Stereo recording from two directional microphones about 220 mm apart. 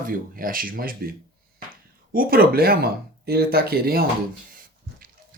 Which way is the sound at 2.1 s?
40° right (ahead or behind).